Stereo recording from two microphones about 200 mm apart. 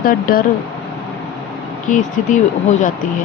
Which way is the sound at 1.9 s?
40° left (ahead or behind).